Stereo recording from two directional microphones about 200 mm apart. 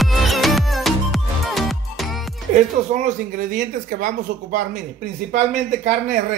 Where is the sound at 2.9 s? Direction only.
40° right (ahead or behind).